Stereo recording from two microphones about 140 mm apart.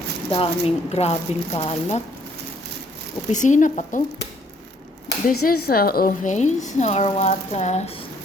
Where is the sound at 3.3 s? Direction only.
60° left (ahead or behind).